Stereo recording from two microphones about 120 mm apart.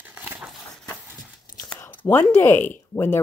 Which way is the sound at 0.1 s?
15° right (ahead or behind).